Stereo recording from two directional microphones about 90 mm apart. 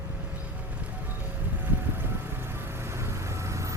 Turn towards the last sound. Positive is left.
turn(degrees=-35)  # may be behind; listen again after turning